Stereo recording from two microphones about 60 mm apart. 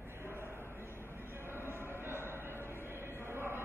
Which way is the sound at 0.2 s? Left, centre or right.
Right.